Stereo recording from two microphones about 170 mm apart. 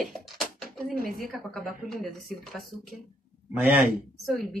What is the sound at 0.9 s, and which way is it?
Speech, 55° right (ahead or behind).